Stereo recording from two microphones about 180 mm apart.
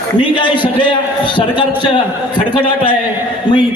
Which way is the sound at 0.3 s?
25° left (ahead or behind).